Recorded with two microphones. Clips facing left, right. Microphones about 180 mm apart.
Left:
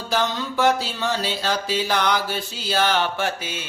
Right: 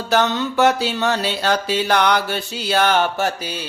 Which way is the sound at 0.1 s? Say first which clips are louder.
Right 5 dB; 70° right (ahead or behind).